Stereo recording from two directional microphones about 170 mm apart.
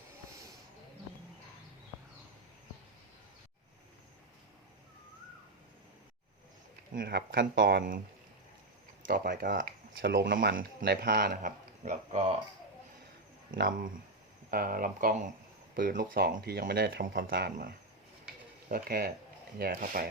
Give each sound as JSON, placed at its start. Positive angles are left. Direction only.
{"t": 6.9, "sound": "speech", "side_deg": -65}
{"t": 9.0, "sound": "speech", "side_deg": -55}
{"t": 13.6, "sound": "speech", "side_deg": -55}